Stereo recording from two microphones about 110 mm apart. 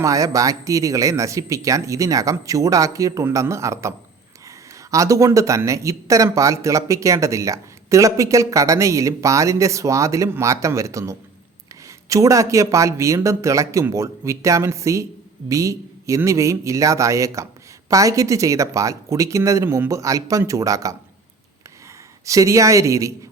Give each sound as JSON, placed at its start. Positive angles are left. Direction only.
{"t": 0.0, "sound": "speech", "side_deg": -30}
{"t": 19.6, "sound": "a man's voice", "side_deg": -15}
{"t": 19.9, "sound": "speech", "side_deg": -30}
{"t": 22.3, "sound": "speech", "side_deg": -30}